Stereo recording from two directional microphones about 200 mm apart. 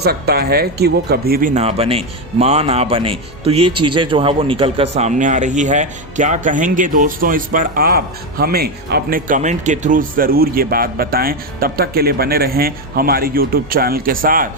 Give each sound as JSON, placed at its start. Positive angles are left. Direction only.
{"t": 0.0, "sound": "speech", "side_deg": -50}